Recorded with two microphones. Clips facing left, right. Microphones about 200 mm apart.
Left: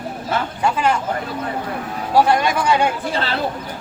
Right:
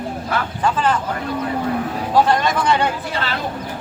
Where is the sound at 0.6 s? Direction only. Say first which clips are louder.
Even; 10° left (ahead or behind).